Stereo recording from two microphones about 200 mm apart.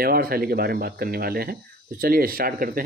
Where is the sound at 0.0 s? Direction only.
50° right (ahead or behind).